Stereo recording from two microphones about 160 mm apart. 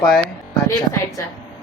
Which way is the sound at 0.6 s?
20° left (ahead or behind).